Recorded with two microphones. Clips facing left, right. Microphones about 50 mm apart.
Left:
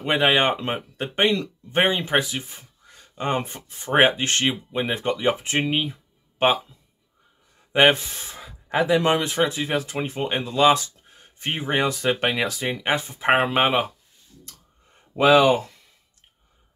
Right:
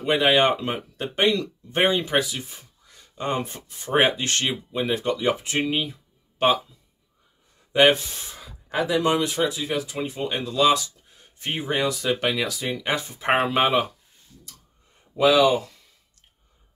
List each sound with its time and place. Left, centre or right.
0.2 s speech: left
7.7 s speech: left
15.1 s speech: left